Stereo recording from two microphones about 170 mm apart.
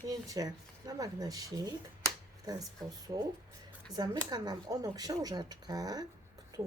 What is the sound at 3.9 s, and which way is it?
A woman's voice, 25° right (ahead or behind).